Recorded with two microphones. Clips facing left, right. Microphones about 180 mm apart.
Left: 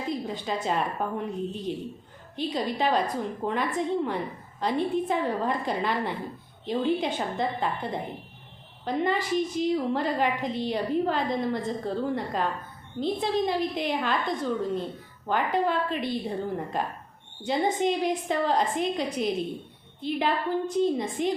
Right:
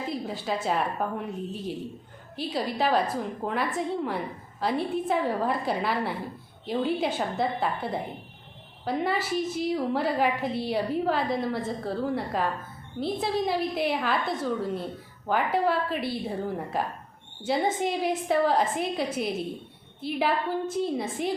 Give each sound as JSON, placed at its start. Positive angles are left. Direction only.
{"t": 0.1, "sound": "a woman's voice", "side_deg": -5}